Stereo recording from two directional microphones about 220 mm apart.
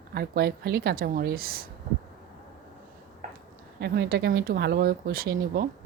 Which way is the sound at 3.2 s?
35° right (ahead or behind).